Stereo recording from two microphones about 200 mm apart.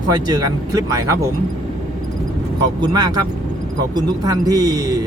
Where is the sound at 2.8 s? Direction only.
20° right (ahead or behind).